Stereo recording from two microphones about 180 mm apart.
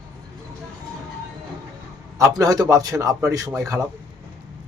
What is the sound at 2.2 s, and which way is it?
A man's voice, 20° right (ahead or behind).